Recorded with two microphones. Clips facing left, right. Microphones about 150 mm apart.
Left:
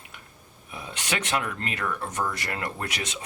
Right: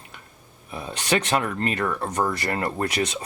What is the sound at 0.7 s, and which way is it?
Speech, 35° right (ahead or behind).